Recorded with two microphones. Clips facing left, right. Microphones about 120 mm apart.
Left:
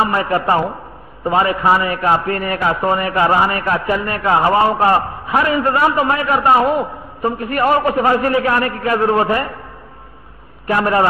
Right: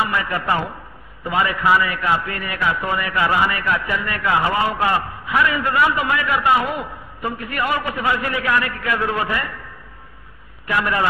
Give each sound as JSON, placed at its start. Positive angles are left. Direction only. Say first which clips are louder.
{"t": 0.0, "sound": "a man's voice", "louder": "left 6 dB", "side_deg": 35}
{"t": 10.7, "sound": "a man's voice", "louder": "left 6 dB", "side_deg": 40}